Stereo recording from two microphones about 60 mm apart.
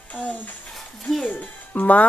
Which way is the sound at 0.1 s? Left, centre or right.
Left.